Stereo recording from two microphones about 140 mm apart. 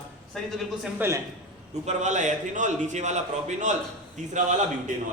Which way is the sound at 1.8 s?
60° right (ahead or behind).